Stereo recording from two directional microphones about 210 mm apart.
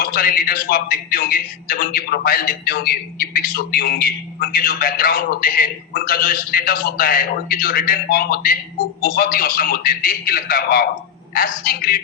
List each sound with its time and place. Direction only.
0.0 s a man's voice: 45° left (ahead or behind)